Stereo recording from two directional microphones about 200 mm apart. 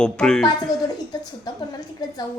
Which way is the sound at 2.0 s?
20° left (ahead or behind).